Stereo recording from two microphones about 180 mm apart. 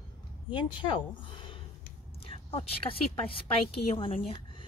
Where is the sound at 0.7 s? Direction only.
30° left (ahead or behind).